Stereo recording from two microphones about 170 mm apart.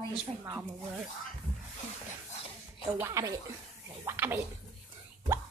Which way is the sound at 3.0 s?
20° right (ahead or behind).